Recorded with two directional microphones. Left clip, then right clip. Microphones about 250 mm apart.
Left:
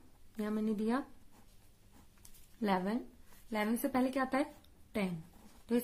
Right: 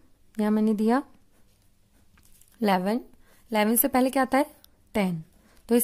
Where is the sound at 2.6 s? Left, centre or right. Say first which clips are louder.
Right 10 dB; right.